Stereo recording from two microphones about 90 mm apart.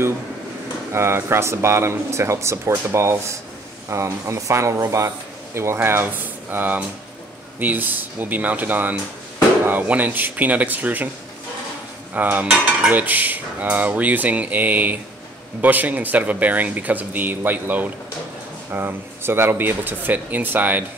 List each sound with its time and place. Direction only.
0.9 s a man's voice: 30° right (ahead or behind)
12.1 s speech: 20° right (ahead or behind)